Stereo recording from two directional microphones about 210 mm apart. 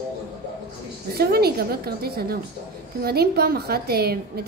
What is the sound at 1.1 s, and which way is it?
A woman's voice, 50° right (ahead or behind).